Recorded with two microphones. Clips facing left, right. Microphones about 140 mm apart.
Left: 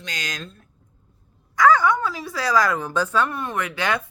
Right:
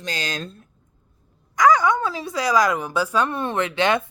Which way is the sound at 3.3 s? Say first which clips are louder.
Right 4 dB; 25° right (ahead or behind).